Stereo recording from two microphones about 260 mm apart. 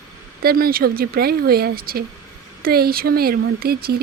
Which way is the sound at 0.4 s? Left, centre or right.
Right.